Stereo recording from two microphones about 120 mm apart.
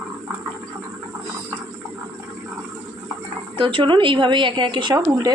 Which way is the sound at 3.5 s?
45° right (ahead or behind).